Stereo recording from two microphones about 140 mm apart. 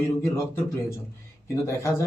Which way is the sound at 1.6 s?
20° left (ahead or behind).